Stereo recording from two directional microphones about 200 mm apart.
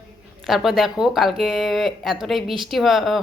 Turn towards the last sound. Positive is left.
turn(degrees=0)  # may be behind; listen again after turning